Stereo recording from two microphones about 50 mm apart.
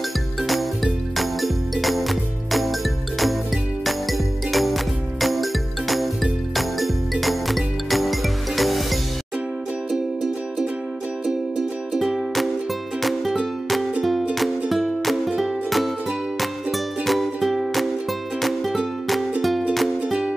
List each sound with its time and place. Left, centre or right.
0.4 s music: centre
11.5 s music: centre
20.1 s music: centre